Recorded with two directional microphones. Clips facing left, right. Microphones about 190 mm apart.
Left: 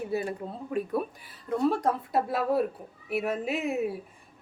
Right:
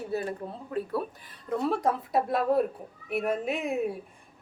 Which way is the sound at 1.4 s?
Centre (ahead or behind).